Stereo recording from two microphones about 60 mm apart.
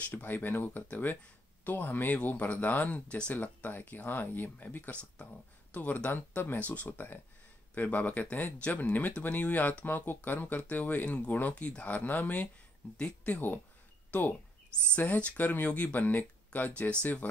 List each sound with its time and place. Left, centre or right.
0.0 s speech: left
12.9 s speech: centre
13.3 s speech: left
15.0 s speech: left